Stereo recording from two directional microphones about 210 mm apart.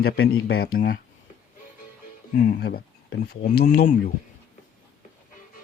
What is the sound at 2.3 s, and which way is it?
Speech, 45° left (ahead or behind).